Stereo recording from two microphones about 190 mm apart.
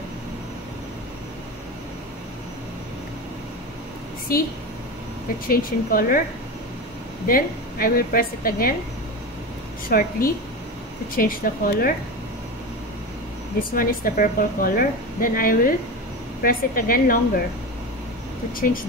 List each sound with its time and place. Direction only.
5.5 s a woman's voice: 50° left (ahead or behind)
7.2 s a woman's voice: 50° left (ahead or behind)
9.8 s a woman's voice: 50° left (ahead or behind)
13.7 s a woman's voice: 50° left (ahead or behind)
18.6 s a woman's voice: 50° left (ahead or behind)